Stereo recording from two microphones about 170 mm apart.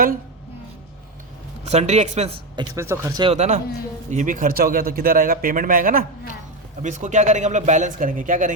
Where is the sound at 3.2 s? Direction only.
40° right (ahead or behind).